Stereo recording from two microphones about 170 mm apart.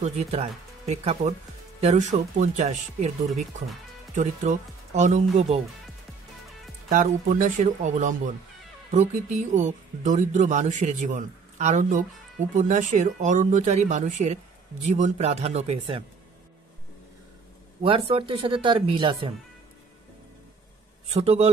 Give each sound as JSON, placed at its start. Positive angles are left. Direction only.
{"t": 0.0, "sound": "speech", "side_deg": -40}
{"t": 4.1, "sound": "speech", "side_deg": -45}
{"t": 6.9, "sound": "speech", "side_deg": -50}
{"t": 17.8, "sound": "speech", "side_deg": -30}
{"t": 21.1, "sound": "speech", "side_deg": -35}